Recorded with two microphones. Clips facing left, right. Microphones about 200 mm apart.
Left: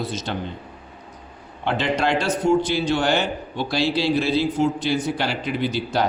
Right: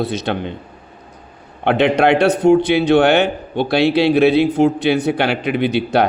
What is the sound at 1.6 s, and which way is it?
A man's voice, 60° right (ahead or behind).